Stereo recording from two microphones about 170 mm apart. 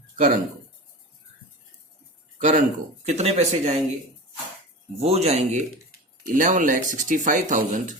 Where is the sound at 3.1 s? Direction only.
40° right (ahead or behind).